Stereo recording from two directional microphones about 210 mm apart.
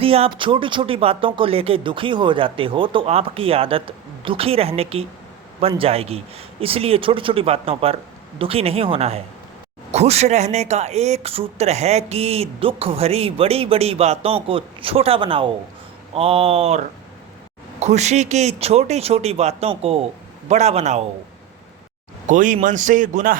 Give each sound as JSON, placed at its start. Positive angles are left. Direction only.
{"t": 0.0, "sound": "speech", "side_deg": -25}
{"t": 22.3, "sound": "speech", "side_deg": -40}